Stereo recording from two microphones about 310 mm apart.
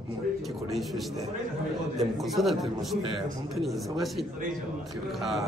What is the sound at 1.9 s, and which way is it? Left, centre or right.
Speech, centre.